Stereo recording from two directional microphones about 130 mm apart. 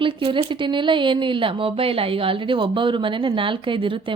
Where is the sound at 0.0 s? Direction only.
40° right (ahead or behind).